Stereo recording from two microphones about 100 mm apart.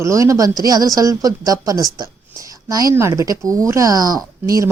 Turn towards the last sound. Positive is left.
turn(degrees=-35)  # may be behind; listen again after turning